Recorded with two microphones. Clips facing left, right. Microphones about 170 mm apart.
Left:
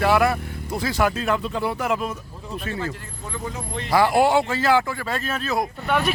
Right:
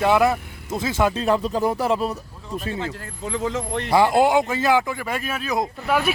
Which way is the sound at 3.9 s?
20° right (ahead or behind).